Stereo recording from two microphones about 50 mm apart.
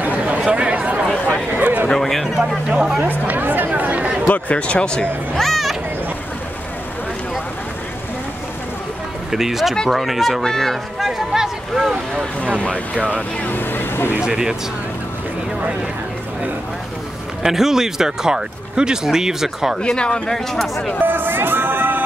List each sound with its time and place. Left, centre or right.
0.0 s chatter: right
1.6 s a sound: right
1.9 s a sound: centre
2.4 s speech: centre
3.0 s a sound: right
4.3 s speech: left
5.4 s music: centre
9.3 s speech: centre
12.9 s speech: right
13.5 s vehicle: left
14.2 s speech: centre
17.4 s speech: centre
19.8 s speech: centre
21.0 s music: right